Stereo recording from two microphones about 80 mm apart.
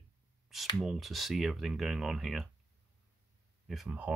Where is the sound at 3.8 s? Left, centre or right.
Right.